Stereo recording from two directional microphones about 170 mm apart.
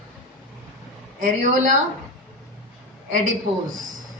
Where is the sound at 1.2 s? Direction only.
50° right (ahead or behind).